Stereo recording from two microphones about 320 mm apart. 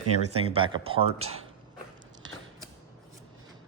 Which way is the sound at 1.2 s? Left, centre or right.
Right.